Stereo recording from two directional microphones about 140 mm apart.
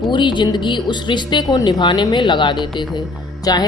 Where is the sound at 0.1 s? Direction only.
35° left (ahead or behind).